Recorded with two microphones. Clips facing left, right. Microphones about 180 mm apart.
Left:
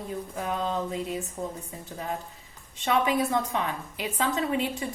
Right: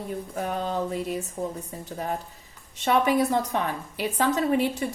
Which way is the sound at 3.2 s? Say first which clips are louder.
Right 3 dB; 40° right (ahead or behind).